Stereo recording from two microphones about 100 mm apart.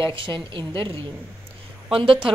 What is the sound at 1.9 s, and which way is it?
Speech, 60° right (ahead or behind).